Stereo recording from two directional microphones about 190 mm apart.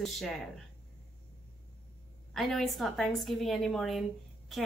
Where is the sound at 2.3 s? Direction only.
Centre (ahead or behind).